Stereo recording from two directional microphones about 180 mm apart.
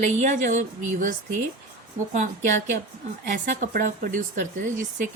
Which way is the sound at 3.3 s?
45° right (ahead or behind).